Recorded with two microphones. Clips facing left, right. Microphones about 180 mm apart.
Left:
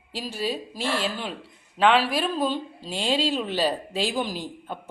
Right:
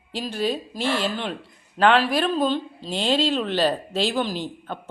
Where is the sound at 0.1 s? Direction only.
5° left (ahead or behind).